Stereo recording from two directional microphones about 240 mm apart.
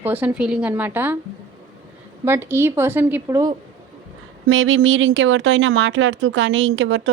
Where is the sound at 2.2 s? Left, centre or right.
Centre.